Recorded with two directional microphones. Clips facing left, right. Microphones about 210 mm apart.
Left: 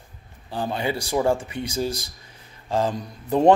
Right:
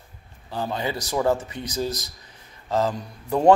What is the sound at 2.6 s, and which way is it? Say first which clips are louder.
Speech: even; 15° left (ahead or behind).